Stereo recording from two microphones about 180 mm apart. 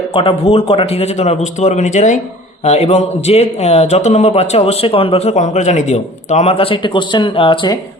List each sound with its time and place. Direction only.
0.1 s a man's voice: 30° left (ahead or behind)